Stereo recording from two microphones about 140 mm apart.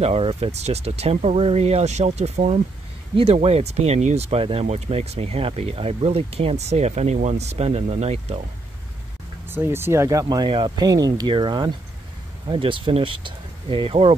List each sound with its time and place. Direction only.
0.0 s speech: 45° right (ahead or behind)
9.5 s speech: 15° right (ahead or behind)
10.2 s speech: 35° right (ahead or behind)